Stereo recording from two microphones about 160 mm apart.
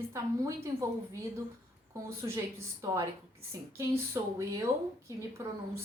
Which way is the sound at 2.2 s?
25° right (ahead or behind).